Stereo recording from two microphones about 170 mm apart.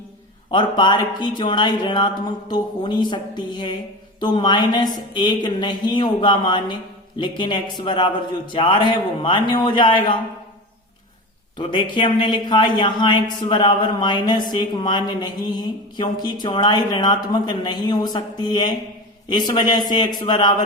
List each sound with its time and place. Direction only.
0.5 s speech: 25° left (ahead or behind)
11.5 s speech: 30° left (ahead or behind)